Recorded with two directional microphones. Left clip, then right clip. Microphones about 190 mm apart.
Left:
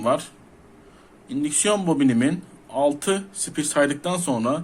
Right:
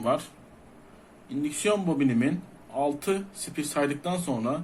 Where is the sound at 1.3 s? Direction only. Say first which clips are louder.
Left 4 dB; 30° left (ahead or behind).